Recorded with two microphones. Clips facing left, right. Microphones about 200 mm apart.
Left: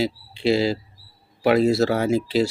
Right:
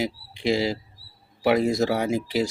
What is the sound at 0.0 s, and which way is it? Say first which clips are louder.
Speech: left 4 dB; 15° right (ahead or behind).